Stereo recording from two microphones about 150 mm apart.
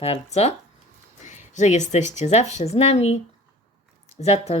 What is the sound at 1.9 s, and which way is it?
Speech, 50° left (ahead or behind).